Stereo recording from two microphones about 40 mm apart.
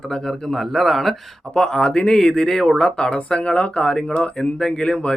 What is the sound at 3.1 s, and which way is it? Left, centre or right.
Speech, left.